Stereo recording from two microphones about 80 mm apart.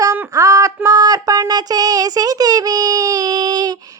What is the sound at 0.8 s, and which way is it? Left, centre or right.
Speech, right.